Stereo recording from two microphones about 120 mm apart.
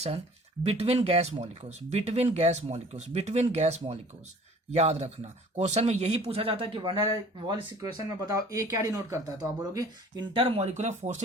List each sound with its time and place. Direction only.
0.6 s speech: 60° right (ahead or behind)
7.0 s speech: 35° right (ahead or behind)
10.3 s speech: 50° right (ahead or behind)
10.6 s speech: 70° right (ahead or behind)